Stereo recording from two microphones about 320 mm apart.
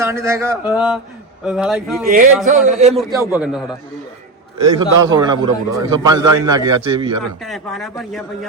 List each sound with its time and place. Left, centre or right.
0.0 s a man's voice: centre
2.1 s speech: right
3.3 s a man's voice: centre
7.4 s a man's voice: centre